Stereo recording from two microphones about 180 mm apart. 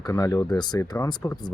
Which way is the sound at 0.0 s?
20° left (ahead or behind).